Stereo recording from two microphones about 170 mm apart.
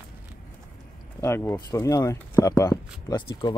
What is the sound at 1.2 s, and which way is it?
Speech, 15° left (ahead or behind).